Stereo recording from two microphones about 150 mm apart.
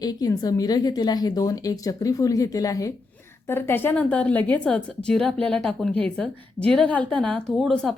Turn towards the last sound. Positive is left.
turn(degrees=5)  # may be behind; listen again after turning